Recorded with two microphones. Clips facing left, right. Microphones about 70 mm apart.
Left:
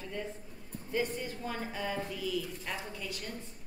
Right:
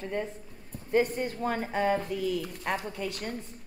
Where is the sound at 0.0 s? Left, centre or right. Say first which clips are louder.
Right 6 dB; right.